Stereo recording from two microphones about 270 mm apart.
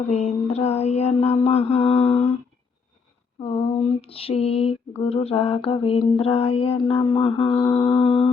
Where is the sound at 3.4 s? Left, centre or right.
Left.